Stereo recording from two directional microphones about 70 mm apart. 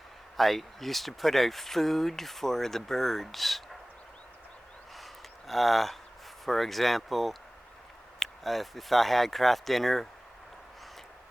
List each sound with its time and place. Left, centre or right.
0.3 s speech: centre
5.5 s speech: centre